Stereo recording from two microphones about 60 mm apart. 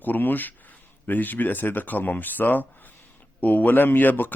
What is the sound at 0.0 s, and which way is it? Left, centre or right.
A man's voice, left.